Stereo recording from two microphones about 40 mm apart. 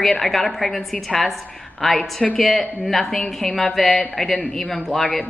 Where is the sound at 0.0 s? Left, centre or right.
Centre.